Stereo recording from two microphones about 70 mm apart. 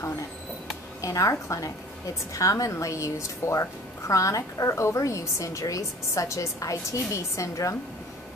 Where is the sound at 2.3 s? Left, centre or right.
Left.